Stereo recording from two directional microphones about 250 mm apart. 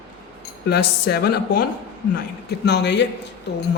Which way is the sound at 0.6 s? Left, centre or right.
Left.